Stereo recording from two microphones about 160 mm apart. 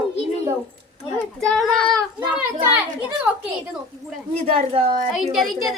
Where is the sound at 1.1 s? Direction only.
5° left (ahead or behind).